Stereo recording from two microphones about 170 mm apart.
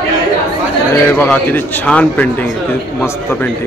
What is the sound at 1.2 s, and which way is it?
A man's voice, 10° left (ahead or behind).